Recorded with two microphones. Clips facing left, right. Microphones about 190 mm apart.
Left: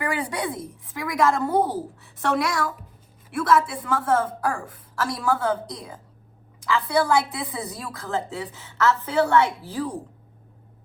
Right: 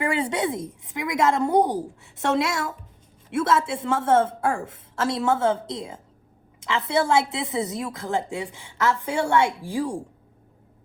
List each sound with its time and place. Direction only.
0.0 s a woman's voice: 25° right (ahead or behind)